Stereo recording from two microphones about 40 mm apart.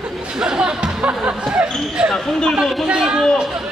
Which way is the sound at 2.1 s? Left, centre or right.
Centre.